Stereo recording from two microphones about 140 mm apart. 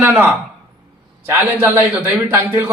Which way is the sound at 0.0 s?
15° right (ahead or behind).